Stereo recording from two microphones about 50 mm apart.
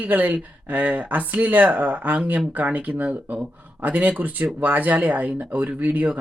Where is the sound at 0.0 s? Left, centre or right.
Right.